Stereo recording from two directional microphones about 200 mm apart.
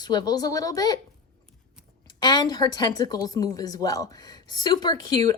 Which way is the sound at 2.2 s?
20° left (ahead or behind).